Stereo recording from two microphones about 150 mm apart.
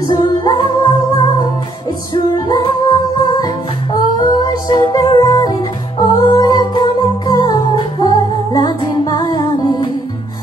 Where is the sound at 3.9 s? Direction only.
30° left (ahead or behind).